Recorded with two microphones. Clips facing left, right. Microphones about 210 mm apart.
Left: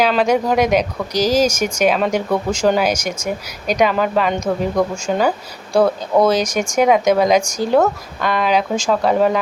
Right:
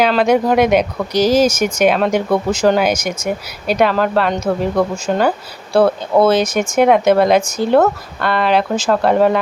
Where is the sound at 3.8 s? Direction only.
5° left (ahead or behind).